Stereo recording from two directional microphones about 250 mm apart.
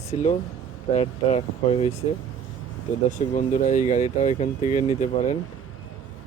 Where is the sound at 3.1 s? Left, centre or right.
Left.